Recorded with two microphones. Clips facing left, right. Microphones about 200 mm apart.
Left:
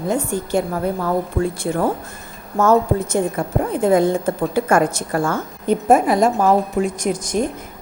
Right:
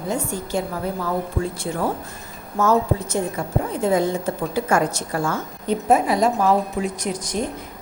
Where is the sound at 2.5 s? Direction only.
55° left (ahead or behind).